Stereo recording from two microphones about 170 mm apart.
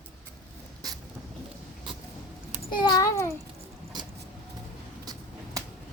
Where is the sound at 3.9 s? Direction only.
25° right (ahead or behind).